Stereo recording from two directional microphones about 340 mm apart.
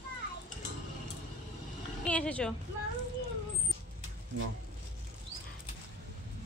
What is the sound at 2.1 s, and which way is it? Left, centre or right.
Speech, centre.